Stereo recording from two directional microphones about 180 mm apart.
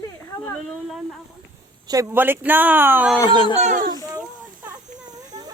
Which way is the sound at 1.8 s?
15° right (ahead or behind).